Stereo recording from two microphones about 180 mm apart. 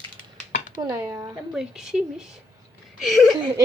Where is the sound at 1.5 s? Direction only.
5° right (ahead or behind).